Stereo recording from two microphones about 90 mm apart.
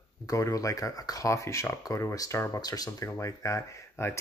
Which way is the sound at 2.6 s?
45° left (ahead or behind).